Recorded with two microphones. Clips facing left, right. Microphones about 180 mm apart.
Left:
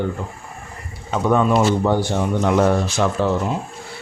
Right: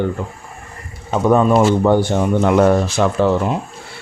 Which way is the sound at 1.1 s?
40° right (ahead or behind).